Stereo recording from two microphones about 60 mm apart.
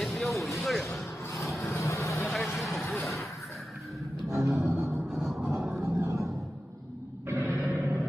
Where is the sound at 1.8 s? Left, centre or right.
Left.